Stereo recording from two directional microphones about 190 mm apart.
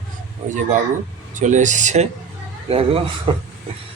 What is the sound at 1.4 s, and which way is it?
Speech, 40° right (ahead or behind).